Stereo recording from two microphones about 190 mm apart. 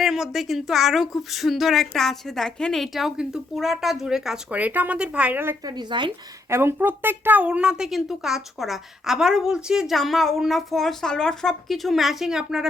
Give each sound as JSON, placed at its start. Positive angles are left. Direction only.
{"t": 0.0, "sound": "speech", "side_deg": 0}
{"t": 5.7, "sound": "speech", "side_deg": -25}
{"t": 6.5, "sound": "speech", "side_deg": -15}